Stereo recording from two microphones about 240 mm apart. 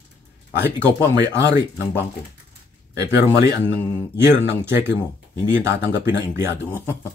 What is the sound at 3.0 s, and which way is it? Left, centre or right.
Speech, centre.